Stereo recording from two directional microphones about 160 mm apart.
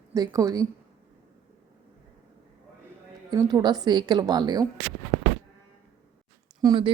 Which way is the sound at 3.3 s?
25° right (ahead or behind).